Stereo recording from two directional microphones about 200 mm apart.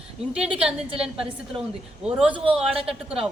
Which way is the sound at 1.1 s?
25° right (ahead or behind).